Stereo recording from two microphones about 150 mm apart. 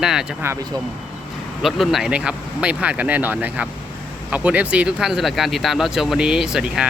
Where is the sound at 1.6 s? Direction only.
Centre (ahead or behind).